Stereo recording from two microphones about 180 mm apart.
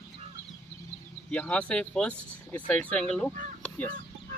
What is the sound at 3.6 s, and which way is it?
Chicken, 10° left (ahead or behind).